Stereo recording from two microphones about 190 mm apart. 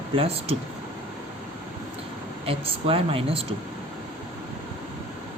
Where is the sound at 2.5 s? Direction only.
30° right (ahead or behind).